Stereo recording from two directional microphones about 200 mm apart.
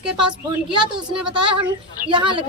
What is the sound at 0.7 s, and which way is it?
Speech, 25° right (ahead or behind).